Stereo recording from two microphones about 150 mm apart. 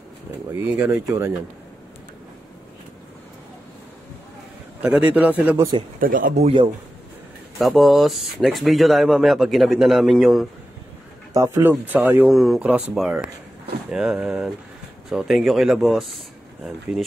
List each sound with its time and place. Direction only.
0.5 s speech: 15° right (ahead or behind)
4.8 s speech: 5° right (ahead or behind)
5.9 s speech: 70° right (ahead or behind)
6.4 s a man's voice: 35° right (ahead or behind)
7.5 s speech: centre (ahead or behind)
11.3 s speech: 20° right (ahead or behind)
12.3 s speech: centre (ahead or behind)